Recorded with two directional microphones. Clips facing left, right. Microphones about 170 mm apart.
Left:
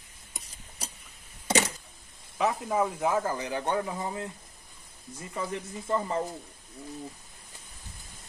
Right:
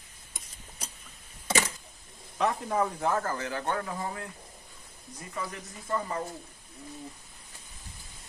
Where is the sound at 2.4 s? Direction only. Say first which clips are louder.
Left 1 dB; 5° left (ahead or behind); by 4.2 s 20° left (ahead or behind).